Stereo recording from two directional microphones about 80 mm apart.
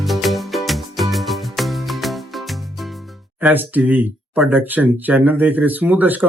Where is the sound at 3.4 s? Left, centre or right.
Right.